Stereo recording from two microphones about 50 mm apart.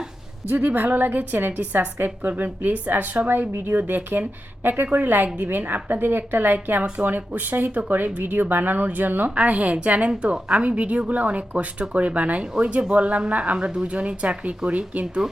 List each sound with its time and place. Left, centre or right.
0.4 s a woman's voice: right
3.2 s a woman's voice: right
9.3 s speech: right
15.0 s speech: centre